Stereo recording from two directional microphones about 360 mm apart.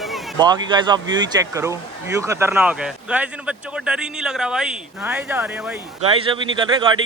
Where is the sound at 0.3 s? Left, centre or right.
Centre.